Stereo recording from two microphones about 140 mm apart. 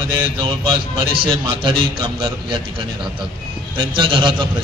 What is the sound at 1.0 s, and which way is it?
A man's voice, 35° right (ahead or behind).